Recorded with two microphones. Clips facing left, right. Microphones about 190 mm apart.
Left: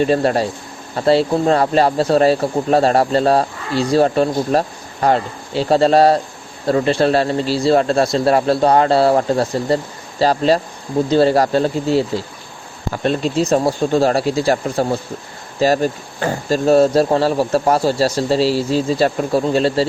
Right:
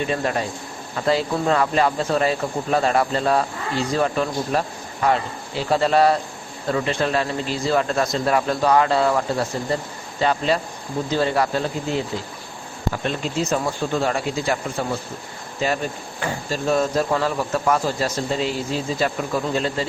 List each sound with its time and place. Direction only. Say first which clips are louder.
0.1 s speech: left 7 dB; 35° left (ahead or behind)